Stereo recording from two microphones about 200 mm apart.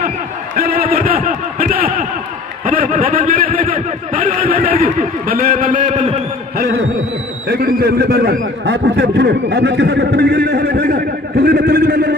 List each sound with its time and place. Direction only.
0.6 s a sound: 50° right (ahead or behind)
5.5 s a man's voice: 40° right (ahead or behind)
7.4 s a man's voice: 50° right (ahead or behind)